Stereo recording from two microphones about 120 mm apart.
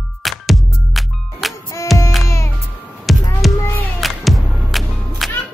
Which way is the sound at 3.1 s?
Centre (ahead or behind).